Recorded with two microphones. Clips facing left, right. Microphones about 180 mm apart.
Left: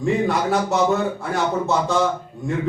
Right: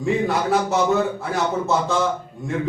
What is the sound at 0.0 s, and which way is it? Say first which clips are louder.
A man's voice: left 1 dB; centre (ahead or behind).